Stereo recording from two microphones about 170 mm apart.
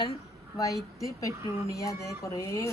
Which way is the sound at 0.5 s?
20° left (ahead or behind).